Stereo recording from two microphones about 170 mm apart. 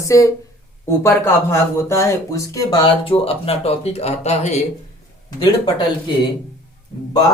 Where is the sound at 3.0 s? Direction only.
35° left (ahead or behind).